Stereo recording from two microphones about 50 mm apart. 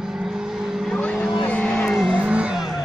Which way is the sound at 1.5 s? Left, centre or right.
Left.